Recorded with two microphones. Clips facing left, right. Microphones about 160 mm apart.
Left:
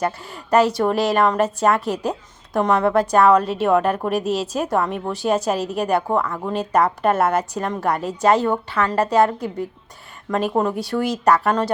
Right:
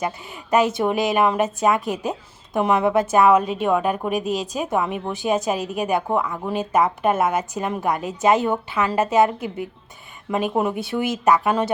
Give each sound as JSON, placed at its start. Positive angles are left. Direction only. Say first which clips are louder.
{"t": 0.8, "sound": "a woman's voice", "louder": "left 1 dB", "side_deg": 0}